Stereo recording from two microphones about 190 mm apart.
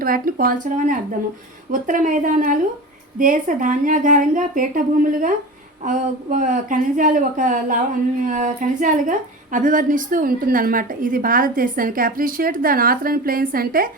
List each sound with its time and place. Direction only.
0.0 s a woman's voice: 50° right (ahead or behind)